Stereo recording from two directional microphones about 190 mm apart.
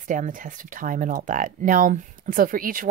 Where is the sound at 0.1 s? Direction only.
45° right (ahead or behind).